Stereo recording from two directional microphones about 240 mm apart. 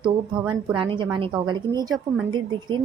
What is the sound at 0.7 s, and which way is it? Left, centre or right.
A woman's voice, centre.